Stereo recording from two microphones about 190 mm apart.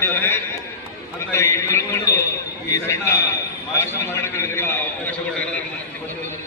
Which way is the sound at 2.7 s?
15° left (ahead or behind).